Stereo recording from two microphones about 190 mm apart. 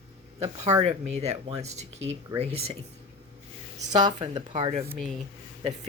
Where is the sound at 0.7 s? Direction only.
35° right (ahead or behind).